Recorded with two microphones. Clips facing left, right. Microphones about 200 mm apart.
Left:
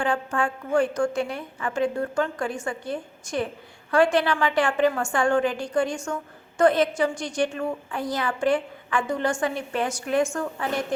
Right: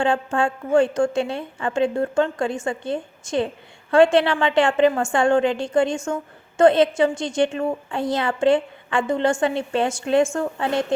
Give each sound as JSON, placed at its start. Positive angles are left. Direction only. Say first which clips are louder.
{"t": 0.0, "sound": "a woman's voice", "louder": "right 4 dB", "side_deg": -25}